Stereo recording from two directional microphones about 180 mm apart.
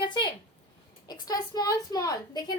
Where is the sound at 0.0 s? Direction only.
25° left (ahead or behind).